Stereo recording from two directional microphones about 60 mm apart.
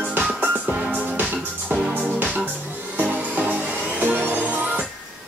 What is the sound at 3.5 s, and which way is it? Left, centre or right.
Music, right.